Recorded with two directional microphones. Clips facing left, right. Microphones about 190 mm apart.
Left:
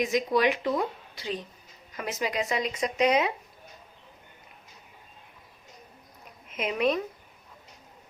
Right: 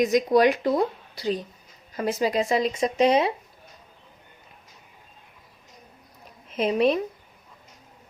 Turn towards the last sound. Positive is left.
turn(degrees=-30)  # may be behind; listen again after turning